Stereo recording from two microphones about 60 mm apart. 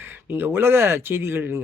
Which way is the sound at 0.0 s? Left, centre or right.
Right.